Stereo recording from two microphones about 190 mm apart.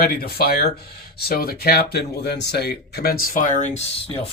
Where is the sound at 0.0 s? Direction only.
55° left (ahead or behind).